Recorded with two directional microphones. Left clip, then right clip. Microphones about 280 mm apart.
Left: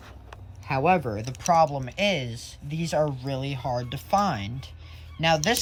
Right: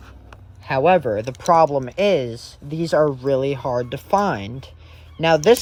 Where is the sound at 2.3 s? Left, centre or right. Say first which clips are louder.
Right 6 dB; left.